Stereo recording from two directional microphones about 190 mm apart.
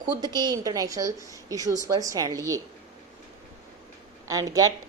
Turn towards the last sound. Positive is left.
turn(degrees=-20)  # may be behind; listen again after turning